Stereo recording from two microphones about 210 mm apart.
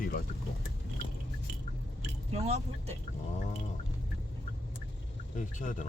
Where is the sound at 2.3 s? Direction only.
30° right (ahead or behind).